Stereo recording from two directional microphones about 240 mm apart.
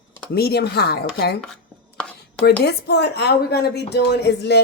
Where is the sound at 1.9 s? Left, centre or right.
Centre.